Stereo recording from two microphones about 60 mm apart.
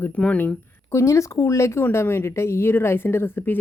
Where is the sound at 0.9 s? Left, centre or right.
Left.